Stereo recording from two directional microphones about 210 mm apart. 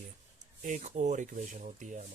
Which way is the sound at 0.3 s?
35° right (ahead or behind).